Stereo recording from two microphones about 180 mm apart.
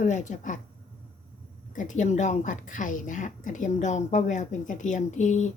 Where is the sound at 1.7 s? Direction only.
45° left (ahead or behind).